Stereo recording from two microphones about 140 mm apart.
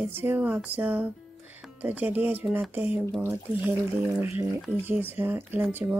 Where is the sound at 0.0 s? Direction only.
15° right (ahead or behind).